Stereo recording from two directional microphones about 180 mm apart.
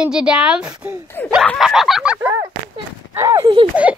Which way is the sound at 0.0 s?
5° right (ahead or behind).